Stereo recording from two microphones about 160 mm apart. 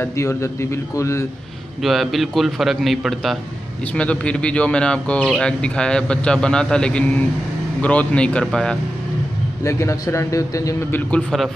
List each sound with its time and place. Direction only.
0.0 s speech: 15° left (ahead or behind)
1.8 s a man's voice: centre (ahead or behind)
9.6 s a man's voice: 20° left (ahead or behind); by 11.5 s centre (ahead or behind)